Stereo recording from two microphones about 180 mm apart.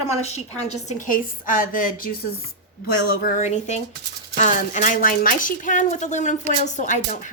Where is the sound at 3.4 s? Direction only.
40° left (ahead or behind).